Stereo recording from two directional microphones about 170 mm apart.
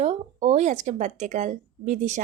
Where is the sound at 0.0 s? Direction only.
40° right (ahead or behind).